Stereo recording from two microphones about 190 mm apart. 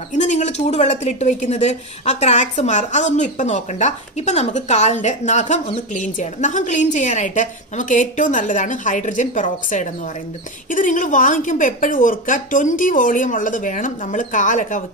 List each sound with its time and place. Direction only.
0.1 s a woman's voice: 40° left (ahead or behind)